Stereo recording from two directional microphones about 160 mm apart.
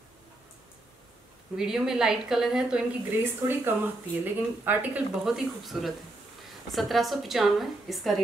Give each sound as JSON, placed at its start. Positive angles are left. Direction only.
{"t": 1.6, "sound": "a woman's voice", "side_deg": -5}